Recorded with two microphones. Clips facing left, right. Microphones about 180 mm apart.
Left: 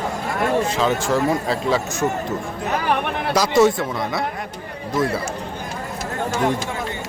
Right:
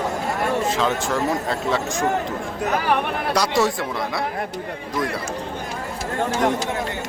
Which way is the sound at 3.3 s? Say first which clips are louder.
Left 5 dB; centre (ahead or behind).